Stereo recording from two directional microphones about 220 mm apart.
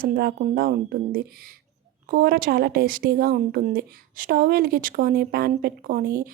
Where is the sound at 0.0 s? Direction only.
45° right (ahead or behind).